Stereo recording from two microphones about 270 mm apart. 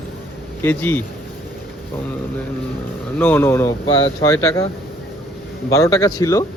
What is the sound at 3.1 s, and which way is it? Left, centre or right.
Speech, centre.